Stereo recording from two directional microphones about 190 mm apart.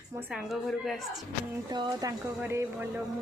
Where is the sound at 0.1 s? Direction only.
10° right (ahead or behind).